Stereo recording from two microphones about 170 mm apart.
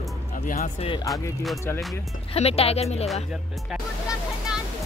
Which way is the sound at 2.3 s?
35° left (ahead or behind).